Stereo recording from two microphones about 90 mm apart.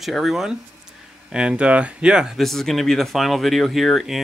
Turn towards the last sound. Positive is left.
turn(degrees=0)  # may be behind; listen again after turning